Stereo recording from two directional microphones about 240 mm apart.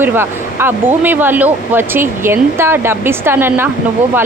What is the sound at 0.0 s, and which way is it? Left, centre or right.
Speech, centre.